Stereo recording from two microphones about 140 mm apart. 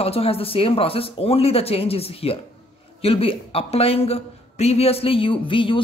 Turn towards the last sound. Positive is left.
turn(degrees=35)  # may be behind; listen again after turning